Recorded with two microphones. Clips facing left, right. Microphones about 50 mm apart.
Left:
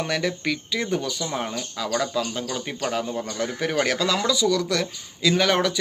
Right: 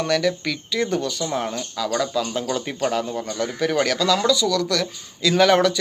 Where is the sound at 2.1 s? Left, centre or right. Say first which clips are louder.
Right 2 dB; left.